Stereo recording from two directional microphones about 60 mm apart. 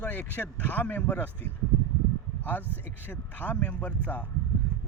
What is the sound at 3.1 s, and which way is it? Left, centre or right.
Speech, left.